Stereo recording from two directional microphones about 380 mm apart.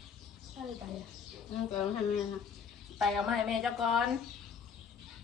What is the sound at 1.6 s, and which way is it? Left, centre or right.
A woman's voice, centre.